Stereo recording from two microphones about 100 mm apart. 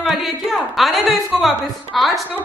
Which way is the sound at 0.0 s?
Centre (ahead or behind).